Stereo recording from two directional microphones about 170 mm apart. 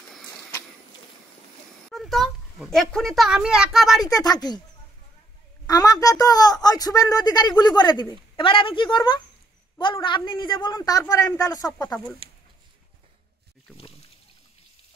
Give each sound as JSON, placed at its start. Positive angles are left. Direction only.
{"t": 0.3, "sound": "a sound", "side_deg": 20}
{"t": 1.9, "sound": "a child's voice", "side_deg": 0}
{"t": 4.0, "sound": "a woman's voice", "side_deg": 20}
{"t": 5.7, "sound": "a woman's voice", "side_deg": 20}